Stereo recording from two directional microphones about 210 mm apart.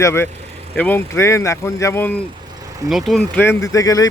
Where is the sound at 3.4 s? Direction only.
15° left (ahead or behind).